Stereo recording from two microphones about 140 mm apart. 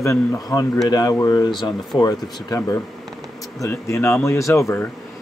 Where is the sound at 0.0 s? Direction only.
20° left (ahead or behind).